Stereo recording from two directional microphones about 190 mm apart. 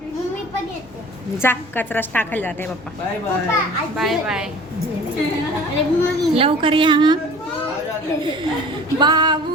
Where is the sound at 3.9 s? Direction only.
Centre (ahead or behind).